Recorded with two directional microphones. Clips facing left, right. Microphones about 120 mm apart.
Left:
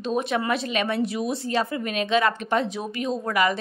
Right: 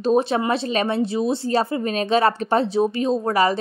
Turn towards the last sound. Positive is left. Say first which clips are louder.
# right 4 dB
turn(degrees=-35)  # may be behind; listen again after turning